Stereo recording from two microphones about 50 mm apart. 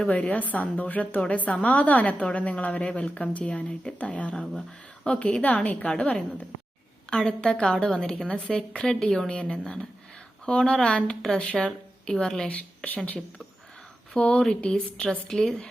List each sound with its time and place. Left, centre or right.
0.1 s a woman's voice: left
5.4 s speech: left
5.9 s a woman's voice: left
12.5 s speech: left
14.2 s a woman's voice: left